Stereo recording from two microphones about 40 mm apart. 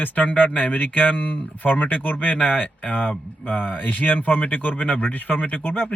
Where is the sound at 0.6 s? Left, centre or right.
Left.